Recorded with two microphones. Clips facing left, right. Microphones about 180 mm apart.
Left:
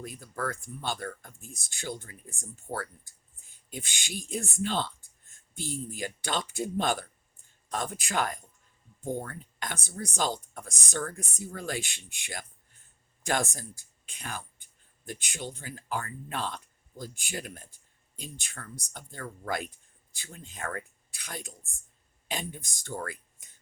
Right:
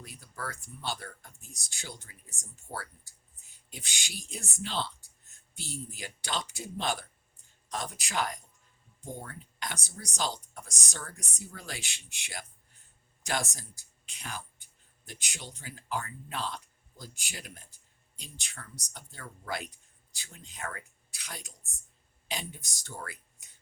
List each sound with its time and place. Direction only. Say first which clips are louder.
0.0 s speech: left 7 dB; 50° left (ahead or behind)